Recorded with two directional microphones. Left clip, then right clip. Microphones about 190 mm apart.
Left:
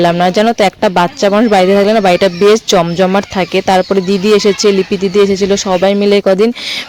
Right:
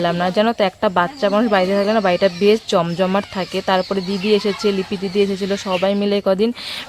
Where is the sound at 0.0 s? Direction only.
35° left (ahead or behind).